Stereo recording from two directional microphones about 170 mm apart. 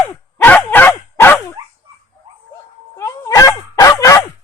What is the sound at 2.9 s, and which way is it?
Dog, 20° left (ahead or behind).